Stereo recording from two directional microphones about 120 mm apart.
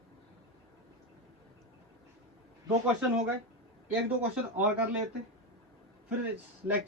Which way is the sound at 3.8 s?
15° right (ahead or behind).